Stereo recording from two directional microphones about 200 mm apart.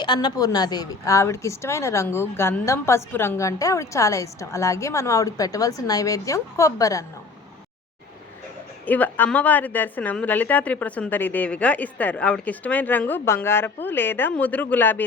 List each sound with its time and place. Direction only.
0.0 s a woman's voice: 20° left (ahead or behind)
8.9 s a woman's voice: 10° left (ahead or behind)